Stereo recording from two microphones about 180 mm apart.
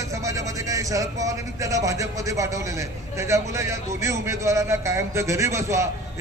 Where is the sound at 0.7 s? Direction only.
20° right (ahead or behind).